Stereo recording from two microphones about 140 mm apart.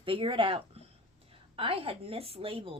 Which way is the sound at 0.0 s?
40° right (ahead or behind).